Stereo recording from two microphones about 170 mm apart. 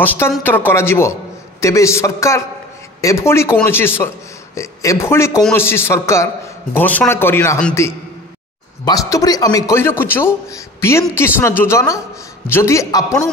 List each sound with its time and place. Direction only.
0.0 s a man's voice: 10° left (ahead or behind)